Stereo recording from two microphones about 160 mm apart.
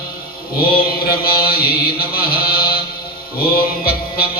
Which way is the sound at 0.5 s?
70° left (ahead or behind).